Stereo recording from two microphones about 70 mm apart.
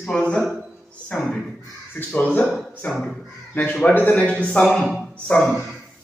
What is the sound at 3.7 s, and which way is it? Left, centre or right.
Speech, left.